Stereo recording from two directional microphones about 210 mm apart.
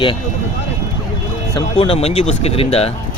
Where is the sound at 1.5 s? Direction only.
25° left (ahead or behind).